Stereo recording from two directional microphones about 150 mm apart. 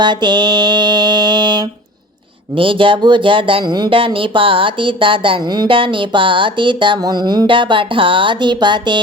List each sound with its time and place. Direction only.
0.0 s speech: 30° right (ahead or behind)